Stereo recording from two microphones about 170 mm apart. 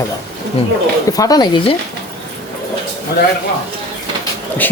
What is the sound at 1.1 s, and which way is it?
Speech, 20° left (ahead or behind).